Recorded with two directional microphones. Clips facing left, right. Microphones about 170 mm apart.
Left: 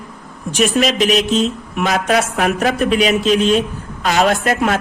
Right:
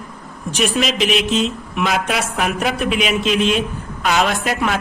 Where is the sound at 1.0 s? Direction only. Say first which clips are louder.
Left 3 dB; 40° left (ahead or behind).